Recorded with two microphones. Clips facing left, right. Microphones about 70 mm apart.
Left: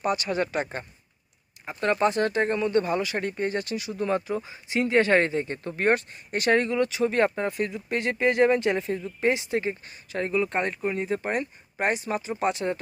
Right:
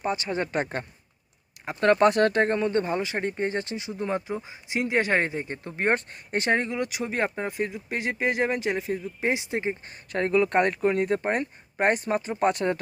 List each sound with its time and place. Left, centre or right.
0.0 s speech: right
0.5 s speech: right
3.9 s speech: centre
9.2 s speech: right
9.9 s speech: right
11.2 s speech: right